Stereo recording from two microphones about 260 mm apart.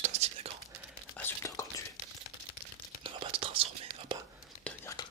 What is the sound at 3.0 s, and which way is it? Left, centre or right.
Whispering, right.